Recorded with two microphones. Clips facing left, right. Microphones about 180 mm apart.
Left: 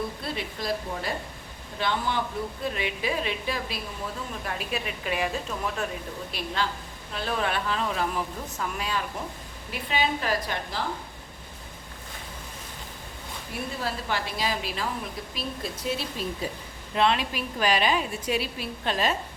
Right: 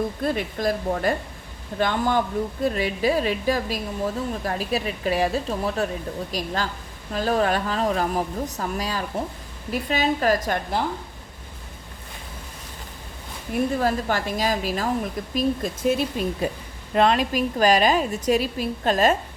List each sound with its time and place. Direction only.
0.2 s a woman's voice: 50° right (ahead or behind)
13.7 s a woman's voice: 45° right (ahead or behind)